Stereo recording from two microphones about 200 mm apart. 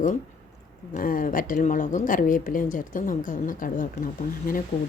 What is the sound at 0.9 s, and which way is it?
A woman's voice, 45° left (ahead or behind).